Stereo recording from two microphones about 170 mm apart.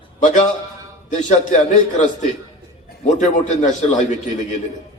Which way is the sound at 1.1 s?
45° left (ahead or behind).